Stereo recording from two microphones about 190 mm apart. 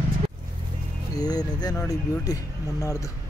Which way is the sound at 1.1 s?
20° left (ahead or behind).